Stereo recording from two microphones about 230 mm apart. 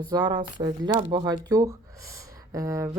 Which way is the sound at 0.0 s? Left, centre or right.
Centre.